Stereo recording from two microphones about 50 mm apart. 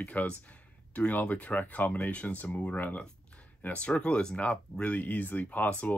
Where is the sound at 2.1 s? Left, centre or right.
Left.